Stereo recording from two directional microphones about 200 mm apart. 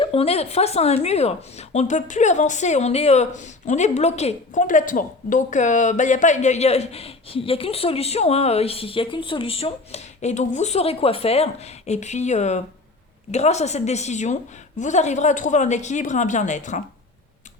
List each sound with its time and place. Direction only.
0.0 s speech: 30° left (ahead or behind)